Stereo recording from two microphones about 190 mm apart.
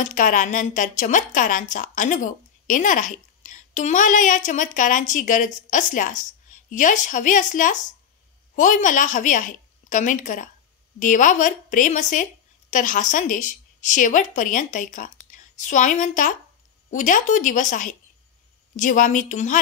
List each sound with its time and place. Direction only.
0.0 s a woman's voice: 40° left (ahead or behind)